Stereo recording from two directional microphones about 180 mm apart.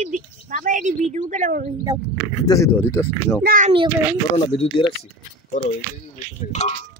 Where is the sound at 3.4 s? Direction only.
45° right (ahead or behind).